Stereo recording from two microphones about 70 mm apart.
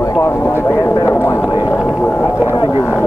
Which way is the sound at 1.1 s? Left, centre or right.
Left.